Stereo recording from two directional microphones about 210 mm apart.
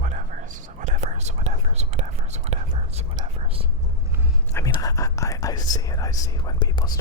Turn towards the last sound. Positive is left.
turn(degrees=20)  # may be behind; listen again after turning